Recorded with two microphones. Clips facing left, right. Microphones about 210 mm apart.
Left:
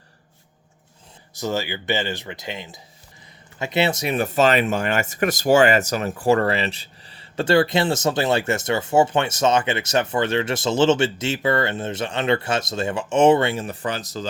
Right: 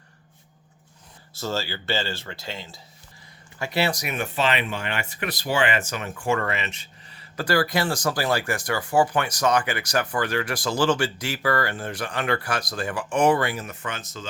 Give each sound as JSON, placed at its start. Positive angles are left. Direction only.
{"t": 1.3, "sound": "speech", "side_deg": 15}